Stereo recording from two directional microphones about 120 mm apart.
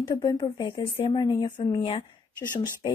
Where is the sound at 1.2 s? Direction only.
35° left (ahead or behind).